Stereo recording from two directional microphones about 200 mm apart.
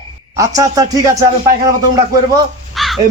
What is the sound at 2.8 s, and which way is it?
Crow, centre (ahead or behind).